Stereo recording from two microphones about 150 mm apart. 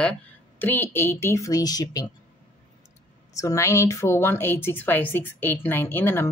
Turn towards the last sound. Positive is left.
turn(degrees=15)  # may be behind; listen again after turning